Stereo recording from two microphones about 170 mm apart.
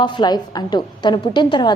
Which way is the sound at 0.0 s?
25° left (ahead or behind).